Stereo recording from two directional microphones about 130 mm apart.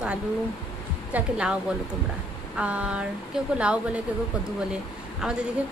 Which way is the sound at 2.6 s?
10° right (ahead or behind).